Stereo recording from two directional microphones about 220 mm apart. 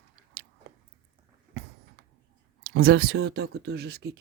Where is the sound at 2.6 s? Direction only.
65° right (ahead or behind); by 4.1 s 45° right (ahead or behind).